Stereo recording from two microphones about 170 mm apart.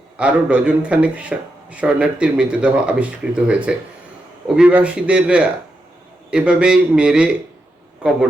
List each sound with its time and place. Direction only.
0.2 s a man's voice: 5° right (ahead or behind)